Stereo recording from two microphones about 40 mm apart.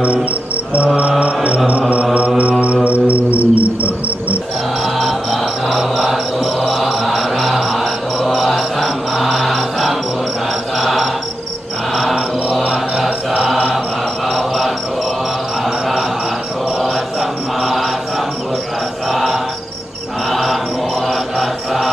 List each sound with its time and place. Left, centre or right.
1.2 s music: right
2.6 s cricket: right
4.9 s music: centre
10.8 s cricket: centre
12.6 s mantra: centre
17.6 s mantra: centre
20.2 s mantra: centre